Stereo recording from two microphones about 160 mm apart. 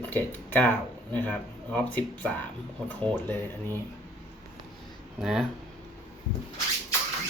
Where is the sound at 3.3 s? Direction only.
15° left (ahead or behind).